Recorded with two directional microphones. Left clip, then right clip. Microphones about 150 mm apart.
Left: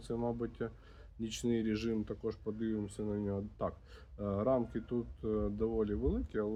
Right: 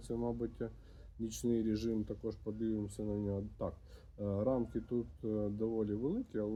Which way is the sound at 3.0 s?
30° left (ahead or behind).